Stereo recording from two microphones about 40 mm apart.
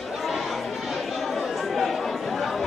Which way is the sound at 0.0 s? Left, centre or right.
Centre.